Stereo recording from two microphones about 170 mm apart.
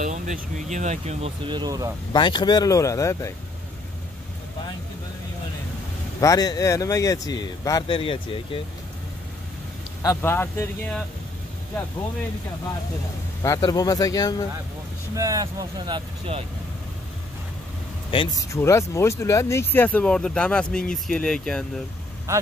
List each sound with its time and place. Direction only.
0.0 s speech: 45° right (ahead or behind); by 2.0 s 20° right (ahead or behind)
2.1 s speech: 25° left (ahead or behind)
6.2 s speech: 20° left (ahead or behind)
10.0 s speech: 15° left (ahead or behind)
13.4 s speech: 20° left (ahead or behind)
15.1 s speech: 20° right (ahead or behind)
18.1 s speech: 30° left (ahead or behind)
18.5 s speech: 15° left (ahead or behind)